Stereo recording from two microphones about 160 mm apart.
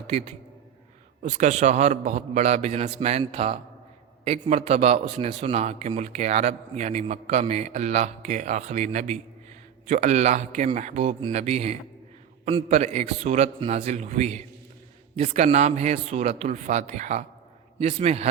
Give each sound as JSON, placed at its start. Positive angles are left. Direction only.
{"t": 0.1, "sound": "a man's voice", "side_deg": -40}